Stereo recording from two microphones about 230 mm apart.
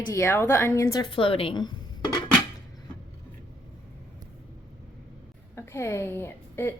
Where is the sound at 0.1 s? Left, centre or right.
Centre.